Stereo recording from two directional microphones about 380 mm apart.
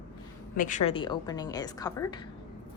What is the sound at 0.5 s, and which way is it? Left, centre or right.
A woman's voice, centre.